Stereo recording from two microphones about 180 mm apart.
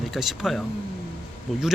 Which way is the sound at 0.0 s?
Centre (ahead or behind).